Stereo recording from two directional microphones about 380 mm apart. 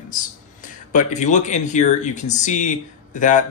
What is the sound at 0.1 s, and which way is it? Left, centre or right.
Speech, centre.